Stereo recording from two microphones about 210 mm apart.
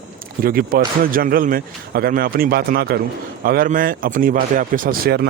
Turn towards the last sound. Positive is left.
turn(degrees=-50)  # may be behind; listen again after turning